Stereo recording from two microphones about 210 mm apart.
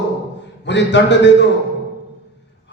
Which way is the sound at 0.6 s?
55° left (ahead or behind).